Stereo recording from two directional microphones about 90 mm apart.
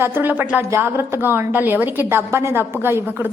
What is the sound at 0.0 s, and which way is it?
A woman's voice, 25° right (ahead or behind).